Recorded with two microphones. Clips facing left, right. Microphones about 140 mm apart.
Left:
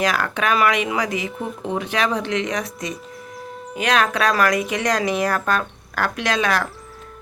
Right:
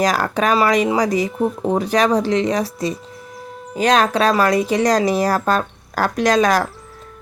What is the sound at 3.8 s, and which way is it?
Speech, 35° right (ahead or behind).